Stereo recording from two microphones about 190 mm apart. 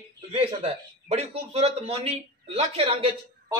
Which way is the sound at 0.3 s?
30° right (ahead or behind).